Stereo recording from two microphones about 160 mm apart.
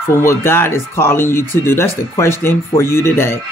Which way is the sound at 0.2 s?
15° left (ahead or behind).